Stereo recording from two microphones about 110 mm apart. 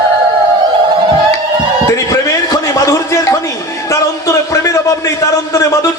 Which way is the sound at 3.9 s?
30° left (ahead or behind).